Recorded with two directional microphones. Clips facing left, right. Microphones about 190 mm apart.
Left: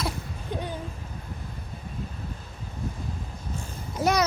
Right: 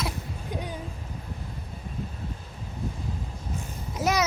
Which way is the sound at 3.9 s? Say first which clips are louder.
Left 2 dB; centre (ahead or behind).